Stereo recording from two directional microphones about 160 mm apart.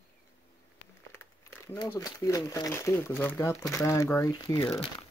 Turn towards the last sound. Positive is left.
turn(degrees=25)  # may be behind; listen again after turning